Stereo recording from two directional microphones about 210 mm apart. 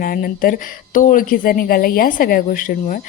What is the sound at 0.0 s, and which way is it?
Speech, 40° left (ahead or behind).